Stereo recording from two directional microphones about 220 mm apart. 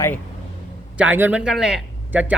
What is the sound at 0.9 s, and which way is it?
Speech, 5° right (ahead or behind).